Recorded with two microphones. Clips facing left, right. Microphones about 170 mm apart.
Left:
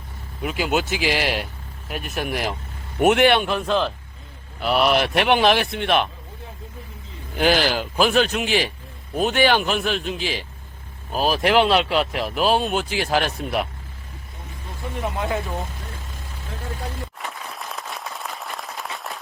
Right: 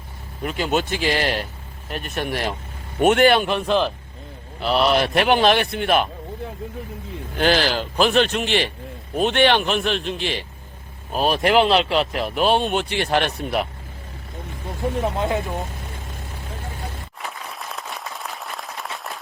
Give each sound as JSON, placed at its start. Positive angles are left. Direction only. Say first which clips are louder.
{"t": 0.4, "sound": "speech", "louder": "even", "side_deg": 5}
{"t": 7.3, "sound": "speech", "louder": "even", "side_deg": 10}
{"t": 15.0, "sound": "speech", "louder": "left 1 dB", "side_deg": -25}
{"t": 17.2, "sound": "applause", "louder": "even", "side_deg": 0}